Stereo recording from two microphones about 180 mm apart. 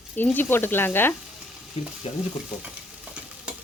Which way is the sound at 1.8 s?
35° left (ahead or behind).